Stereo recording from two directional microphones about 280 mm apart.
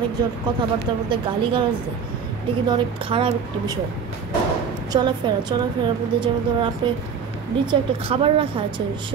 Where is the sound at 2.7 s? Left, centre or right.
Centre.